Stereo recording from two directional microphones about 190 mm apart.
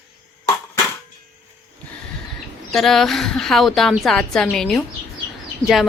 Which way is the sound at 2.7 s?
Centre (ahead or behind).